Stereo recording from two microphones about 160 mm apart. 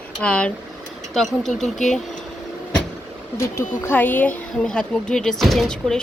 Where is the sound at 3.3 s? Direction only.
15° left (ahead or behind).